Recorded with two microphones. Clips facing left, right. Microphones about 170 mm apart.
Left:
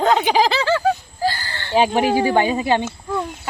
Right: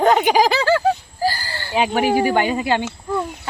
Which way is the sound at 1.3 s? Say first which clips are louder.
Right 1 dB; 40° right (ahead or behind).